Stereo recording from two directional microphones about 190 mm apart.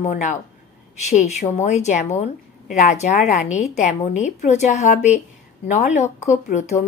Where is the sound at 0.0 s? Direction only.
40° left (ahead or behind).